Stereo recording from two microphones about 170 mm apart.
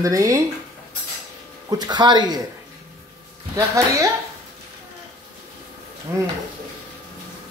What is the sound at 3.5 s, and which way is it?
Speech, 20° right (ahead or behind).